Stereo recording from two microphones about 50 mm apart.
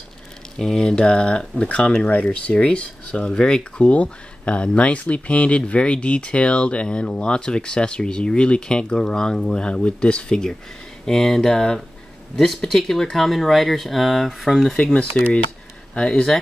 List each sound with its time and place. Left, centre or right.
0.6 s speech: centre
15.2 s speech: left